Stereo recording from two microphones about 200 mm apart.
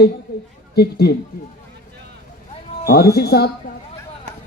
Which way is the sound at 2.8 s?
50° left (ahead or behind).